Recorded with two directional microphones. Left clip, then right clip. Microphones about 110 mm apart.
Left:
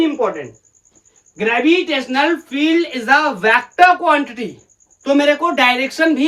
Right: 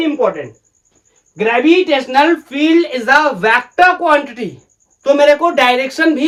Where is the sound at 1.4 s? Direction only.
25° right (ahead or behind).